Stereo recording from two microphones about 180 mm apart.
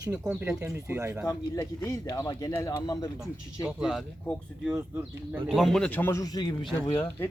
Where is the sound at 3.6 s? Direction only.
5° right (ahead or behind).